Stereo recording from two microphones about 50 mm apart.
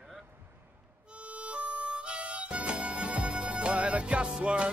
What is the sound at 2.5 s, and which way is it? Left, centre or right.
Music, right.